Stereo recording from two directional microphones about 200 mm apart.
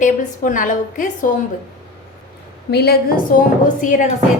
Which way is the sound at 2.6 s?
55° left (ahead or behind).